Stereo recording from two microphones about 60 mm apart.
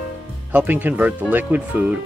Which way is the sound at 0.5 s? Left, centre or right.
Right.